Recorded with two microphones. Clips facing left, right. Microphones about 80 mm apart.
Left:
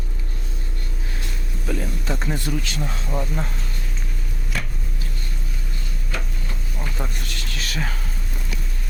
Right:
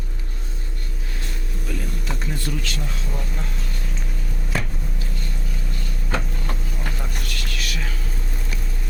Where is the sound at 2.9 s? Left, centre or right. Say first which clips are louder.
Left 5 dB; left.